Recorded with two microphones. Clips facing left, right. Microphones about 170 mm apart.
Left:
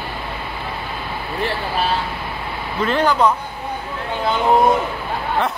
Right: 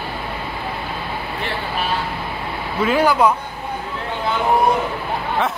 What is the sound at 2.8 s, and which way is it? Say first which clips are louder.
Speech: right 1 dB; 10° right (ahead or behind).